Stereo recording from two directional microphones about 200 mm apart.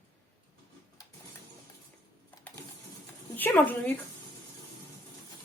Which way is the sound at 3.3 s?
10° left (ahead or behind).